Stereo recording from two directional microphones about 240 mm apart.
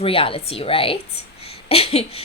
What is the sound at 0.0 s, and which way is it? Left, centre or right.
Speech, left.